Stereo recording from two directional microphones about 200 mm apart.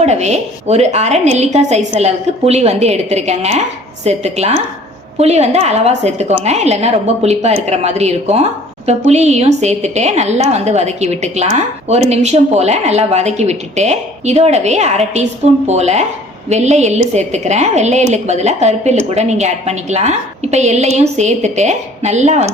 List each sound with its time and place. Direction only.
0.0 s a woman's voice: 35° right (ahead or behind)